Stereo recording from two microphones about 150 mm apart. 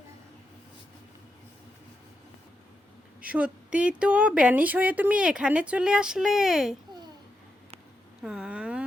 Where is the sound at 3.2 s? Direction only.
10° right (ahead or behind).